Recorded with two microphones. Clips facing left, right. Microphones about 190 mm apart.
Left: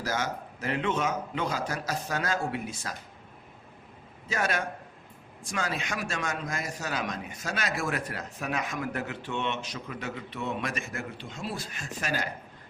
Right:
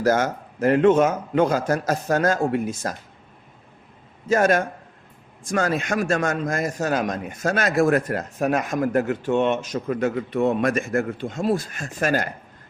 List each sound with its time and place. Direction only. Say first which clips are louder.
0.0 s a man's voice: right 11 dB; 50° right (ahead or behind)
4.3 s a man's voice: right 11 dB; 45° right (ahead or behind)